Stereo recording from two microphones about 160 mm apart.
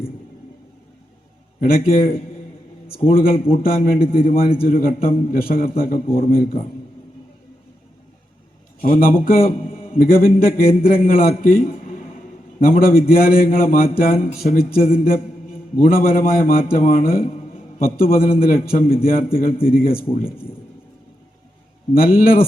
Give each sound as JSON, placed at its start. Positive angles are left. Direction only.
{"t": 1.6, "sound": "a man's voice", "side_deg": 65}
{"t": 8.8, "sound": "a man's voice", "side_deg": 60}
{"t": 12.5, "sound": "a man's voice", "side_deg": 65}
{"t": 14.2, "sound": "speech", "side_deg": 40}
{"t": 14.5, "sound": "a man's voice", "side_deg": 65}
{"t": 21.9, "sound": "a man's voice", "side_deg": 65}